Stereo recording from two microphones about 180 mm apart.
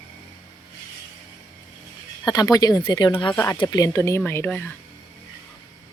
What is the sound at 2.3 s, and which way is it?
Speech, 20° left (ahead or behind).